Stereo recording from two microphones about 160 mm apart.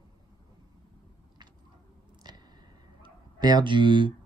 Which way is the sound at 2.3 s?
25° right (ahead or behind).